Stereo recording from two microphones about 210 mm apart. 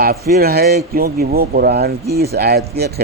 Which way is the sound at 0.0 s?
45° right (ahead or behind).